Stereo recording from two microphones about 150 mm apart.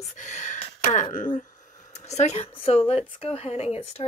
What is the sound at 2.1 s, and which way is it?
Speech, 45° left (ahead or behind).